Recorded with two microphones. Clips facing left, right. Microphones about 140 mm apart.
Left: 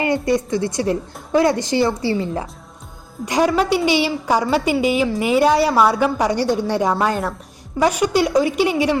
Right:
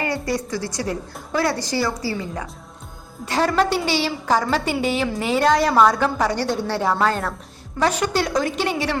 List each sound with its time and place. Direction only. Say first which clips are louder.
0.0 s a woman's voice: left 6 dB; 20° left (ahead or behind)
3.2 s a woman's voice: left 3 dB; 15° left (ahead or behind)